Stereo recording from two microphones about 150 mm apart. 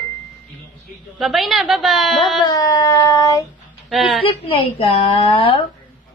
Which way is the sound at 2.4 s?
25° left (ahead or behind).